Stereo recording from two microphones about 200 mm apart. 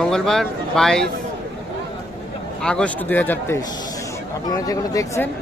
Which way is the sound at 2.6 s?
5° left (ahead or behind).